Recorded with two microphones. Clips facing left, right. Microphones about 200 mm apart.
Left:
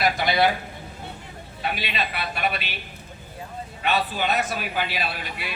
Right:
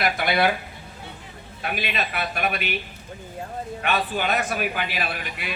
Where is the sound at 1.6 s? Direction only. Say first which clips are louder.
Even; 50° right (ahead or behind).